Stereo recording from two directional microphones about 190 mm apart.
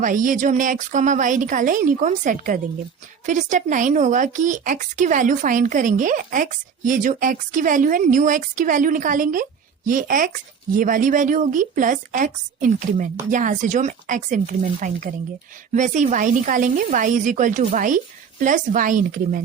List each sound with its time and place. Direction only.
0.0 s speech: 45° right (ahead or behind)